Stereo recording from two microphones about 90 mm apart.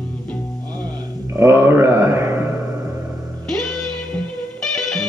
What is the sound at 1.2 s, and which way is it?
Mantra, 30° right (ahead or behind).